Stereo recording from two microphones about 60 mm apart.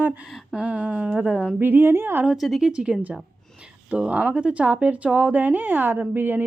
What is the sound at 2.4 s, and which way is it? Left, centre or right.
Speech, centre.